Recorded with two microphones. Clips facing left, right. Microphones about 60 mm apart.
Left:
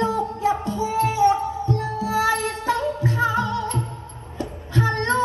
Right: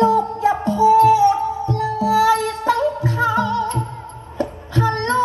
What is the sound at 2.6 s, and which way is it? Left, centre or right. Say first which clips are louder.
Music: right 4 dB; right.